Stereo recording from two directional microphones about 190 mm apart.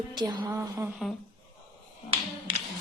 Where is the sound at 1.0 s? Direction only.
Centre (ahead or behind).